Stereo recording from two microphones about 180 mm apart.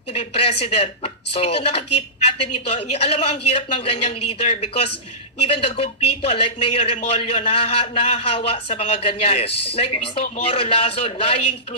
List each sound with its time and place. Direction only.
0.1 s speech: 35° left (ahead or behind)